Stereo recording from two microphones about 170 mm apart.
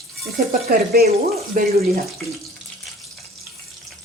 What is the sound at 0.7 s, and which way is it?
Speech, 65° right (ahead or behind).